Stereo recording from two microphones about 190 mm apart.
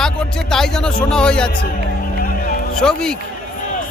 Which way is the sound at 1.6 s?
50° left (ahead or behind).